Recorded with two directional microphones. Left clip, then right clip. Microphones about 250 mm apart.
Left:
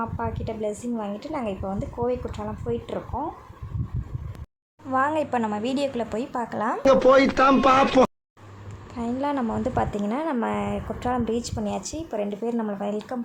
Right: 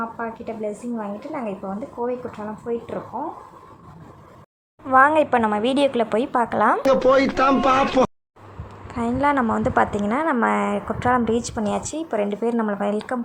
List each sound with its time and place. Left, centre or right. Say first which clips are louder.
0.2 s a woman's voice: right 1 dB; centre
4.9 s a woman's voice: right 8 dB; centre
9.0 s a woman's voice: right 7 dB; centre